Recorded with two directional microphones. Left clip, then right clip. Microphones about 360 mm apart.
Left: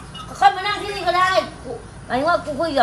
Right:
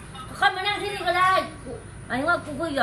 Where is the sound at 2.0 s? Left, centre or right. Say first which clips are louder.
Left 5 dB; centre.